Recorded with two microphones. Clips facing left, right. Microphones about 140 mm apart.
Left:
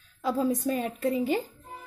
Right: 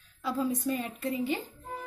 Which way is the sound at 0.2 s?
45° left (ahead or behind).